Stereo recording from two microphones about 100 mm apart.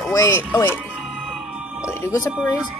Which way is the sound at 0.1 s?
30° left (ahead or behind).